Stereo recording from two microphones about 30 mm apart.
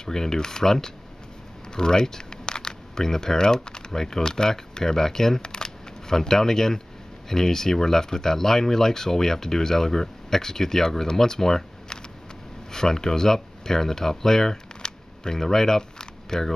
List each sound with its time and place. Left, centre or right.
0.0 s speech: centre
5.5 s camera: left
7.2 s speech: centre
14.8 s camera: left
15.3 s speech: centre